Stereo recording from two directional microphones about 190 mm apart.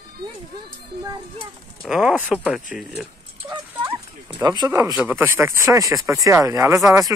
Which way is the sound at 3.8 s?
10° right (ahead or behind).